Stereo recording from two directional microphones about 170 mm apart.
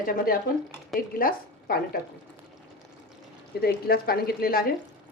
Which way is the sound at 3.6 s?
65° left (ahead or behind).